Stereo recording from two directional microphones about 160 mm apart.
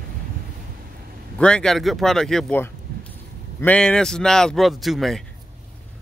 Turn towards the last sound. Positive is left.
turn(degrees=0)  # may be behind; listen again after turning